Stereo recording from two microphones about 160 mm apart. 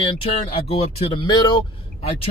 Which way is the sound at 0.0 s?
35° left (ahead or behind).